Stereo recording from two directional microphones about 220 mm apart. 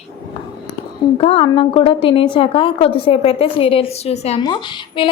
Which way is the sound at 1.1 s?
25° left (ahead or behind).